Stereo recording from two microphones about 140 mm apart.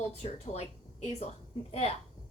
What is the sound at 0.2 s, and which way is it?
Speech, 50° left (ahead or behind).